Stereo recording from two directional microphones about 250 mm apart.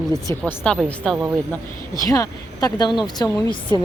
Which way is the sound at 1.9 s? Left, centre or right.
Centre.